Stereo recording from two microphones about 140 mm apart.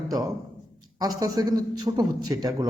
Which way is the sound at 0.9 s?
25° right (ahead or behind).